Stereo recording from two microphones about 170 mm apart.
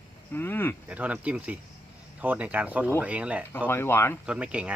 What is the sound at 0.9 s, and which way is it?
Speech, 10° right (ahead or behind).